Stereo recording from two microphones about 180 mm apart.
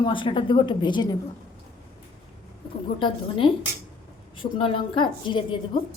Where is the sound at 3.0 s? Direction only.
30° left (ahead or behind).